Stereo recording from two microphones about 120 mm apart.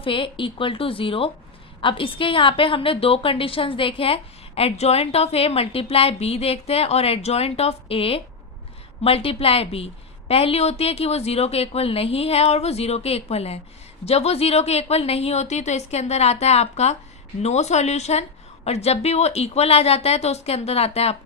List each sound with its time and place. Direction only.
0.0 s a woman's voice: 45° left (ahead or behind)